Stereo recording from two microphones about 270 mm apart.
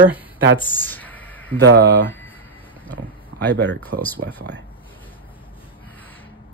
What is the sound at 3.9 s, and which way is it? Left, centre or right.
Speech, right.